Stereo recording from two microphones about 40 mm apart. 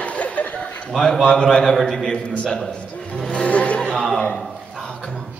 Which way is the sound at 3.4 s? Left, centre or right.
Left.